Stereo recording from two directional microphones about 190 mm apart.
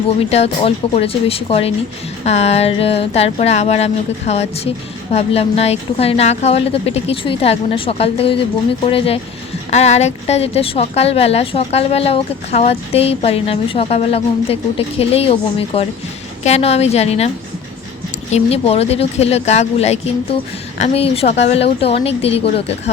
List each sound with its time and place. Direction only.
0.3 s a woman's voice: 30° left (ahead or behind)